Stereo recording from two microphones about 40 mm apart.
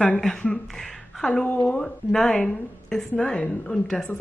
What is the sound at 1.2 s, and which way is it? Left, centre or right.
Speech, centre.